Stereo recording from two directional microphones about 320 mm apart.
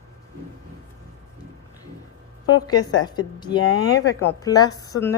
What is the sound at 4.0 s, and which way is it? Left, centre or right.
Speech, left.